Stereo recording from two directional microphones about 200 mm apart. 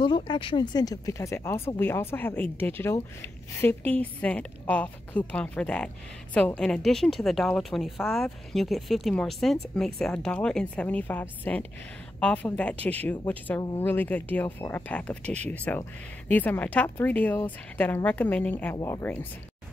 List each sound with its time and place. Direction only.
0.0 s speech: 20° left (ahead or behind)